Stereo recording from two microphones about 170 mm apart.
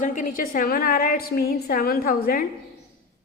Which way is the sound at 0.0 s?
50° left (ahead or behind).